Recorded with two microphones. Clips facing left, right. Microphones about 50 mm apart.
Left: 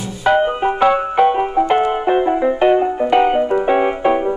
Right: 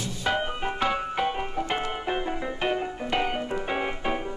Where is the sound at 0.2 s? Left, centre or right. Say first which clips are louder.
Left 13 dB; left.